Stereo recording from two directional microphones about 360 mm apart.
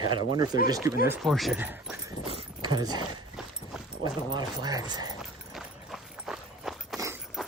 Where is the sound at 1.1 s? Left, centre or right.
Centre.